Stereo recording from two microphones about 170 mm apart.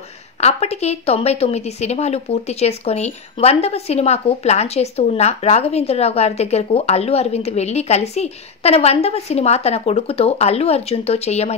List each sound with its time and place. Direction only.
0.4 s a woman's voice: 40° left (ahead or behind)